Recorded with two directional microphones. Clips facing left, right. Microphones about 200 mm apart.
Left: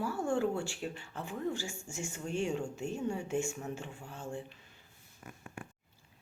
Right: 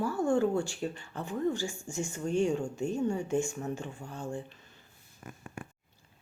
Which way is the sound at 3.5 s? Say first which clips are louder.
Right 4 dB; 5° left (ahead or behind).